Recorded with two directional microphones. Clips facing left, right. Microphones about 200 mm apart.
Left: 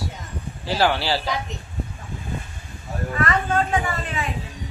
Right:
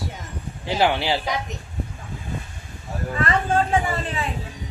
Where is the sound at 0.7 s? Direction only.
20° right (ahead or behind).